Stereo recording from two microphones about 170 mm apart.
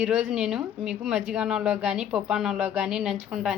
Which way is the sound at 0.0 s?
5° right (ahead or behind).